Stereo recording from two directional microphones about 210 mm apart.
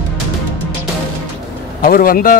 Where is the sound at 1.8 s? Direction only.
45° left (ahead or behind).